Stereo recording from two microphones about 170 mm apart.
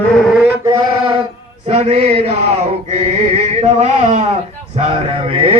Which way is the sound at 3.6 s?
40° right (ahead or behind).